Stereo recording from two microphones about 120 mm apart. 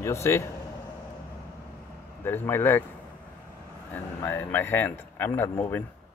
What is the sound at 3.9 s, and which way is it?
Speech, 15° left (ahead or behind).